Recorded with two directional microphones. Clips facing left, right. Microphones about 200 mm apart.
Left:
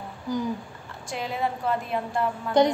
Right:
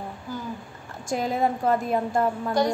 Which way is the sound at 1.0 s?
45° right (ahead or behind).